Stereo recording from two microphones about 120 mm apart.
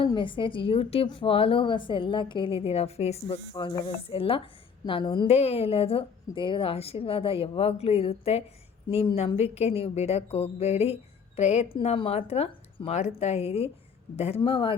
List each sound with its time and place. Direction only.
0.0 s a woman's voice: 45° left (ahead or behind); by 3.3 s 60° left (ahead or behind)
3.5 s a woman's voice: 35° left (ahead or behind)
5.3 s a woman's voice: 60° left (ahead or behind)